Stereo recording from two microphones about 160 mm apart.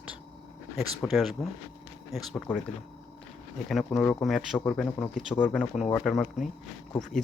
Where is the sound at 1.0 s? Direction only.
Centre (ahead or behind).